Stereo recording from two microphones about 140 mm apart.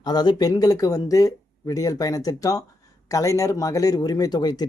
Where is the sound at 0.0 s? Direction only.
30° left (ahead or behind).